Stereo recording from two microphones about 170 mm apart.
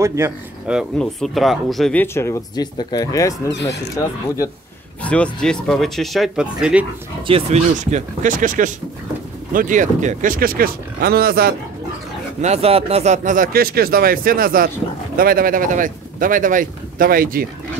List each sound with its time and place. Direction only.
0.0 s speech: 15° right (ahead or behind)
0.7 s speech: centre (ahead or behind); by 3.5 s 20° left (ahead or behind)
3.5 s speech: 90° left
3.9 s speech: 20° left (ahead or behind)
5.0 s speech: 5° left (ahead or behind)
7.2 s speech: 35° right (ahead or behind)
7.7 s speech: 45° right (ahead or behind)
12.4 s speech: 40° right (ahead or behind); by 17.5 s 60° right (ahead or behind)